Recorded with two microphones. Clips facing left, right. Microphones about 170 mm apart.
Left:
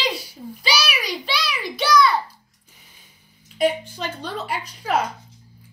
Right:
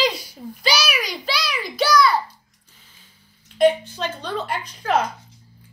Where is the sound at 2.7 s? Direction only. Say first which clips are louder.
Left 1 dB; 15° left (ahead or behind).